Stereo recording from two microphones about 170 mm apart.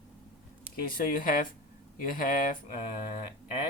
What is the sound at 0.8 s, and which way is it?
Speech, 55° left (ahead or behind).